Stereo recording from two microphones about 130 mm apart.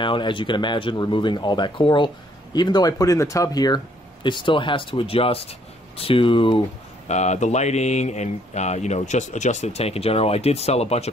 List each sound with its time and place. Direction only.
0.0 s speech: 40° left (ahead or behind)
7.1 s speech: 60° left (ahead or behind)